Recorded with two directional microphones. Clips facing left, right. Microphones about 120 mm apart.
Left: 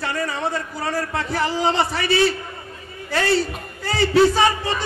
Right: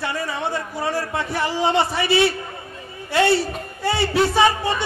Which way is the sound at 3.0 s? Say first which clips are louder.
Right 4 dB; 25° right (ahead or behind).